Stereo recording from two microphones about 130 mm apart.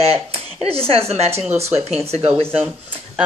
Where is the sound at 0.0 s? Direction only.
50° right (ahead or behind).